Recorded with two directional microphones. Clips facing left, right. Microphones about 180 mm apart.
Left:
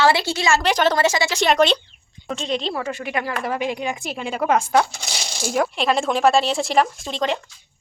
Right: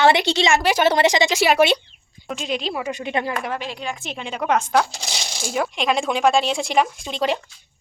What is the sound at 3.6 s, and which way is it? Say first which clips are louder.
Speech: left 5 dB; 15° left (ahead or behind).